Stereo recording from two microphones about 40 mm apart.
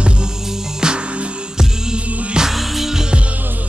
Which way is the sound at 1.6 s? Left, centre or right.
Centre.